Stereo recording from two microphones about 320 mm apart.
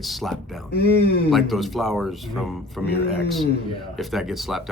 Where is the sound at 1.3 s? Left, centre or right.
Centre.